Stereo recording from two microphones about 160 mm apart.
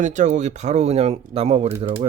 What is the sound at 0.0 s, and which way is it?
Speech, 50° right (ahead or behind).